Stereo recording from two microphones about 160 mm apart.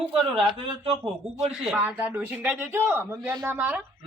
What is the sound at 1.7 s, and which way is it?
Speech, 10° right (ahead or behind).